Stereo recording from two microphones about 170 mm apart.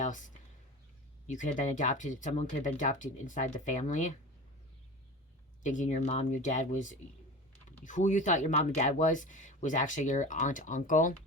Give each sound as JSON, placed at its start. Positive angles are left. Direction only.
{"t": 0.0, "sound": "a sound", "side_deg": 50}
{"t": 1.3, "sound": "speech", "side_deg": 45}
{"t": 5.6, "sound": "speech", "side_deg": 45}